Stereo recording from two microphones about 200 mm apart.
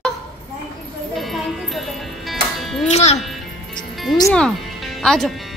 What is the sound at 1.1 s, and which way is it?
Music, centre (ahead or behind).